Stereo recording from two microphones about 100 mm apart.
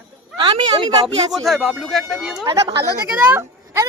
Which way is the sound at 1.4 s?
Centre (ahead or behind).